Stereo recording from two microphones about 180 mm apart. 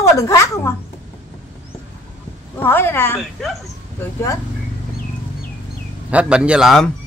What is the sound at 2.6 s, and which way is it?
A woman's voice, 10° left (ahead or behind).